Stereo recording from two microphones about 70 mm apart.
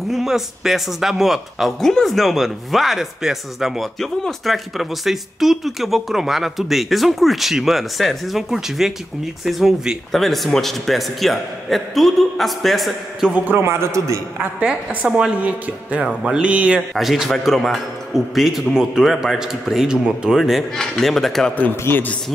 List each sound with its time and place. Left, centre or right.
0.1 s speech: centre
13.5 s a man's voice: right
14.6 s a woman's voice: centre
15.0 s music: centre
16.9 s speech: centre
21.5 s speech: left